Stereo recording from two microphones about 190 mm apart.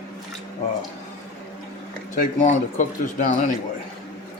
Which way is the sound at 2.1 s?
45° left (ahead or behind).